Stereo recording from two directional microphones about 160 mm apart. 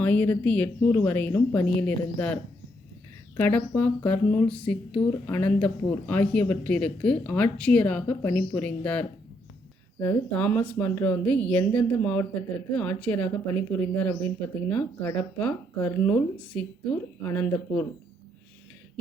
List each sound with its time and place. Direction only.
0.0 s speech: 10° left (ahead or behind)